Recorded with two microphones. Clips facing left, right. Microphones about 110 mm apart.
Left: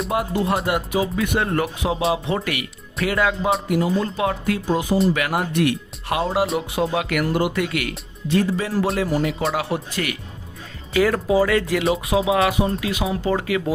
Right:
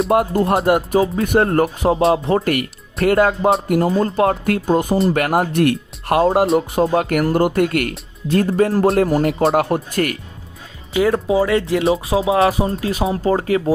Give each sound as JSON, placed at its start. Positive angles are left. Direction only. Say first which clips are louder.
{"t": 0.1, "sound": "speech", "louder": "right 4 dB", "side_deg": -50}
{"t": 10.9, "sound": "speech", "louder": "right 2 dB", "side_deg": -25}